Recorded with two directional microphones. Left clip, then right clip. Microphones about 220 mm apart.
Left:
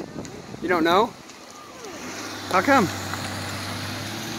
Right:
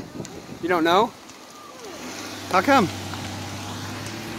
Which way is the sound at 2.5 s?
5° right (ahead or behind).